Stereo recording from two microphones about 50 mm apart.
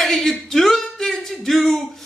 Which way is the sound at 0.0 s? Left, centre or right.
Centre.